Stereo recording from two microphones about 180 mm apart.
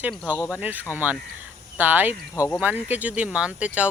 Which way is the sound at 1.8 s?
10° right (ahead or behind).